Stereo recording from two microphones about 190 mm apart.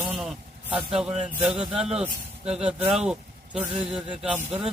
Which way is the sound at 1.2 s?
5° right (ahead or behind).